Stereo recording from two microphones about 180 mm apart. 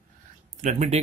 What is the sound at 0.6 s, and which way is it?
Speech, 40° right (ahead or behind).